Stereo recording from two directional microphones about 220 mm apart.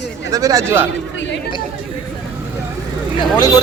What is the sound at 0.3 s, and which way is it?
Speech, 15° right (ahead or behind).